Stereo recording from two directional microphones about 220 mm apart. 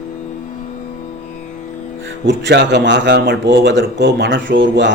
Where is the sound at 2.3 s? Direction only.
50° right (ahead or behind).